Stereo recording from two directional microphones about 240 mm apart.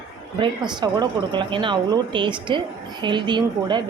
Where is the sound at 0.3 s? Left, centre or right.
Centre.